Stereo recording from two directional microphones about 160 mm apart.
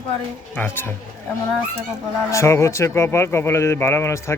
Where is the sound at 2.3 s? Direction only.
20° left (ahead or behind).